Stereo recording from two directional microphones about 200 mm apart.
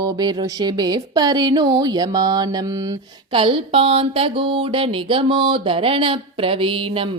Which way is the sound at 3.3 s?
25° right (ahead or behind).